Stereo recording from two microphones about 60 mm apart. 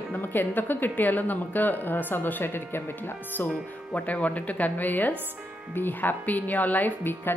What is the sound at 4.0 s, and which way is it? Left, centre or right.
Speech, left.